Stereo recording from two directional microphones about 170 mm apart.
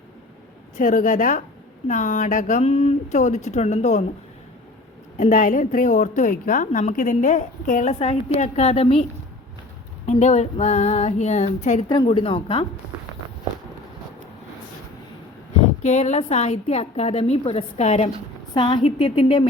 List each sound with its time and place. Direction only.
0.8 s a woman's voice: 50° left (ahead or behind)
5.1 s a woman's voice: 50° left (ahead or behind)
10.1 s a woman's voice: 40° left (ahead or behind)
12.0 s a woman's voice: 30° left (ahead or behind)
15.8 s a woman's voice: 45° left (ahead or behind)